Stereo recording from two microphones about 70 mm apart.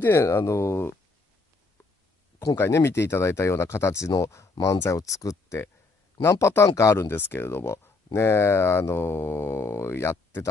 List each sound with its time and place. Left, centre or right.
0.0 s speech: left
2.5 s speech: left
7.1 s speech: left